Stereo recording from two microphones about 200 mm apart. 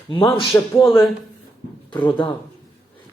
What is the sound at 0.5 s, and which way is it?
Speech, 15° left (ahead or behind).